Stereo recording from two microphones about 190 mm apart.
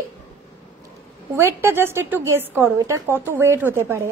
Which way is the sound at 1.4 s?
15° right (ahead or behind).